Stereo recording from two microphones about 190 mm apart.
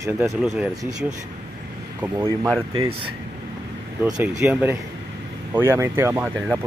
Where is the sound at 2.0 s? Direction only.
15° right (ahead or behind).